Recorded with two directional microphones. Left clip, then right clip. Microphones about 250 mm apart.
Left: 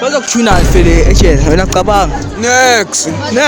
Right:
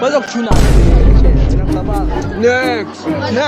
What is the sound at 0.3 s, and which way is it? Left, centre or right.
Speech, left.